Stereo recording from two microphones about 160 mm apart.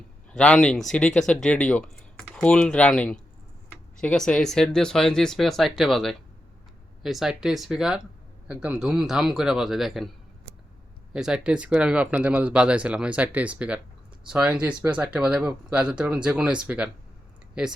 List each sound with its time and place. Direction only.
0.3 s speech: 5° left (ahead or behind)
11.1 s speech: 5° right (ahead or behind)